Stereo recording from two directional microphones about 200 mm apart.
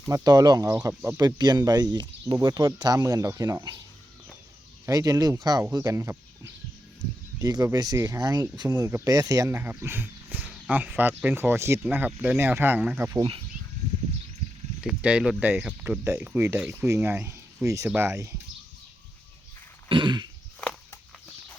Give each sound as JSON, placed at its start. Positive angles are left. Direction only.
{"t": 0.1, "sound": "speech", "side_deg": -20}
{"t": 4.9, "sound": "speech", "side_deg": -15}
{"t": 14.8, "sound": "speech", "side_deg": -5}
{"t": 19.9, "sound": "speech", "side_deg": -25}
{"t": 20.6, "sound": "walk", "side_deg": 5}